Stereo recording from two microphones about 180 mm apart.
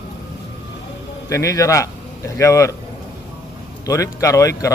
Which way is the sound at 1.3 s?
20° left (ahead or behind).